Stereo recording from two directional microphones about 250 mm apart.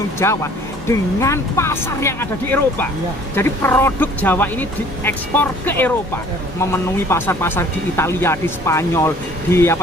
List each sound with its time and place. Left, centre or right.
0.2 s speech: centre